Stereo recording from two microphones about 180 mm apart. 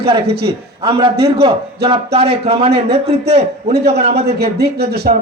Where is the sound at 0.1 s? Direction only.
25° right (ahead or behind).